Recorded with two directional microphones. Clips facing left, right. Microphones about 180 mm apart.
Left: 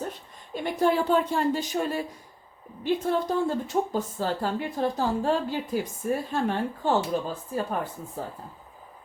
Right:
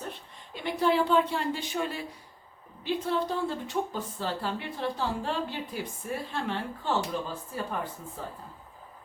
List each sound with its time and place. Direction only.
0.1 s a woman's voice: 45° left (ahead or behind)